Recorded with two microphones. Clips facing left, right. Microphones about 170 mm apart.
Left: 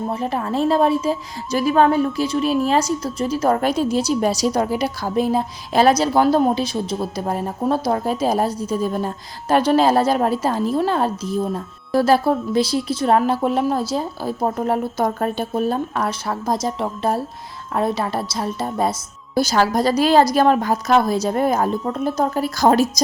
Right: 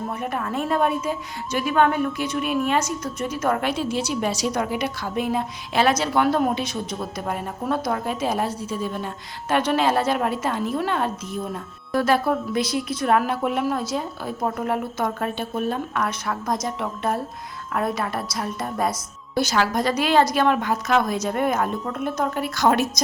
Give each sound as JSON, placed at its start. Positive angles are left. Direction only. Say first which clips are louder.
{"t": 0.1, "sound": "a woman's voice", "louder": "left 5 dB", "side_deg": 30}